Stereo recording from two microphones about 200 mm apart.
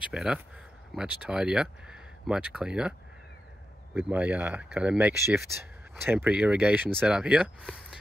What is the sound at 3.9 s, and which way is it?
Speech, 5° right (ahead or behind).